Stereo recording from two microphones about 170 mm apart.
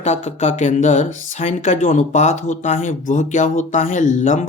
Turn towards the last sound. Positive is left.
turn(degrees=45)  # may be behind; listen again after turning